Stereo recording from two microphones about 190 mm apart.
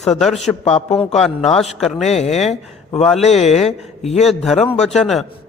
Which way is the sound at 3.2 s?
35° left (ahead or behind).